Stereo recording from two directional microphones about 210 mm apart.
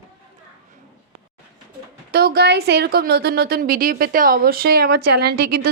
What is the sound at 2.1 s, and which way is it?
A woman's voice, 50° right (ahead or behind).